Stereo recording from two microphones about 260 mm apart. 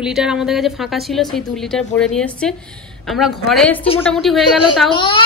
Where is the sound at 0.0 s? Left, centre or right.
Centre.